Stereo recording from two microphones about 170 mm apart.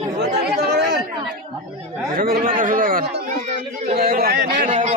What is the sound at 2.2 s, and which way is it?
Speech, 60° right (ahead or behind).